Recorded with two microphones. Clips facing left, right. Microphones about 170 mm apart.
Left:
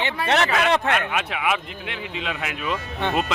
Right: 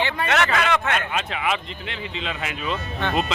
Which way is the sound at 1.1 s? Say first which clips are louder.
Left 1 dB; 10° left (ahead or behind).